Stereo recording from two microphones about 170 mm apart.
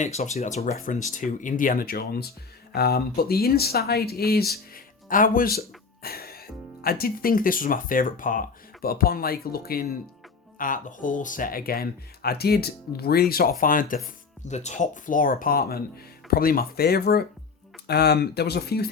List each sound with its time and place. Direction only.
0.0 s speech: 40° left (ahead or behind); by 9.8 s 65° left (ahead or behind)
10.6 s speech: 50° left (ahead or behind)
14.4 s speech: 45° left (ahead or behind); by 18.9 s 70° left (ahead or behind)